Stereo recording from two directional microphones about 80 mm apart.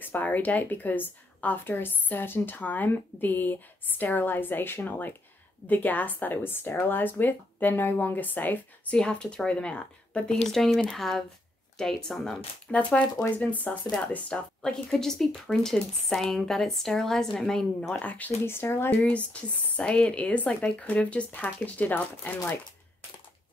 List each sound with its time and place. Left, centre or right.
0.0 s speech: left
8.9 s speech: centre